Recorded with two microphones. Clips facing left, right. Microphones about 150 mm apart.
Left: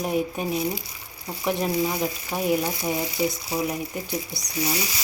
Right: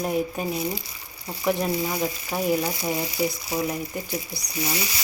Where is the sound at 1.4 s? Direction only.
Centre (ahead or behind).